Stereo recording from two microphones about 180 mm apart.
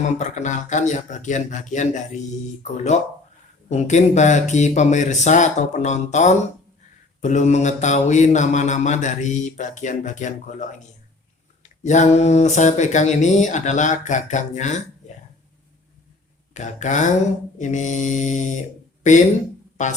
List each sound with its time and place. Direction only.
0.2 s speech: 40° left (ahead or behind)
2.9 s mantra: 40° left (ahead or behind)
11.8 s mantra: 40° left (ahead or behind)
16.6 s speech: 40° left (ahead or behind)
19.1 s mantra: 40° left (ahead or behind)